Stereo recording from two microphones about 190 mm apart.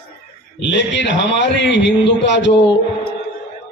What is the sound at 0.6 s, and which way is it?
A man's voice, 70° left (ahead or behind).